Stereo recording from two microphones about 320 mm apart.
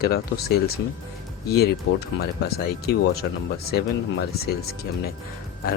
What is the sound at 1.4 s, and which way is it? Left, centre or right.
Speech, left.